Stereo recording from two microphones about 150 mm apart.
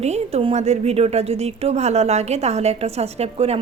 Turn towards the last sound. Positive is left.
turn(degrees=-40)  # may be behind; listen again after turning